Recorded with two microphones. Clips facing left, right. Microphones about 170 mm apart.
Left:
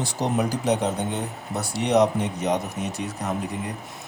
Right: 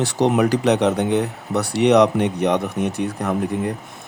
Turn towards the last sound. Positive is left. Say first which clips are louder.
# right 7 dB
turn(degrees=-60)  # may be behind; listen again after turning